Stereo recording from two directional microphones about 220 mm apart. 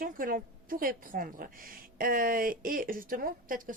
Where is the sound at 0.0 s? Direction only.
40° right (ahead or behind).